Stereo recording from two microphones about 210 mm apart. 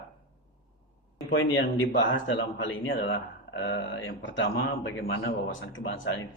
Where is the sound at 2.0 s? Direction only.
60° left (ahead or behind).